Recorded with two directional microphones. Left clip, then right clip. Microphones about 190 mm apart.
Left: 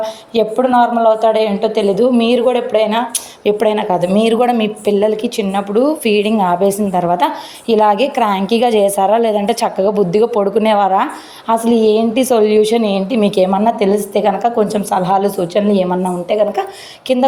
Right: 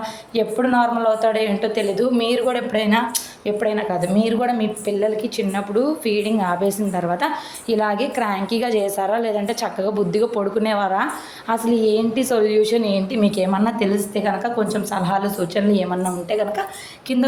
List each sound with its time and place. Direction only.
0.0 s a woman's voice: 30° left (ahead or behind)
3.4 s a woman's voice: 35° left (ahead or behind)